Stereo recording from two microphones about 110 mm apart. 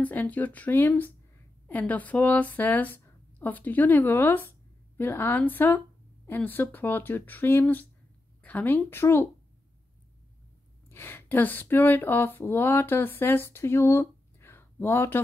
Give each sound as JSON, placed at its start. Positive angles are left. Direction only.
{"t": 0.0, "sound": "speech", "side_deg": 15}
{"t": 10.9, "sound": "speech", "side_deg": 20}